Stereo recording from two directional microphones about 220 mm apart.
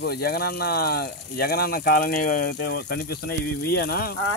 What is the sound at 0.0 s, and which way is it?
Speech, 45° left (ahead or behind).